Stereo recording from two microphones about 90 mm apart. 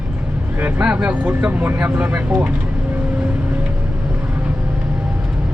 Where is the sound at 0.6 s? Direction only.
15° right (ahead or behind).